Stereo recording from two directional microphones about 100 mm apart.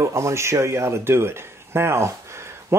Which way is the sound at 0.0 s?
30° right (ahead or behind).